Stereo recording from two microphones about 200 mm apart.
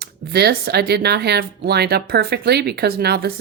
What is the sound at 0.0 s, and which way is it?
Speech, 55° right (ahead or behind).